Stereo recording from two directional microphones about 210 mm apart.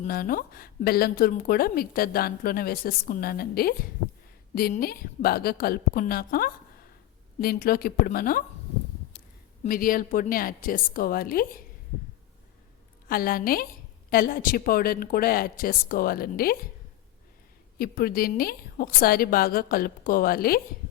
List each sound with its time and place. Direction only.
0.0 s speech: 45° left (ahead or behind)
9.6 s speech: 40° left (ahead or behind)
13.1 s speech: 45° left (ahead or behind)
17.7 s speech: 45° left (ahead or behind)